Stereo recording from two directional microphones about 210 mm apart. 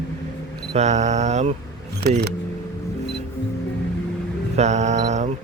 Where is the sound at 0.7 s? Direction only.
30° right (ahead or behind).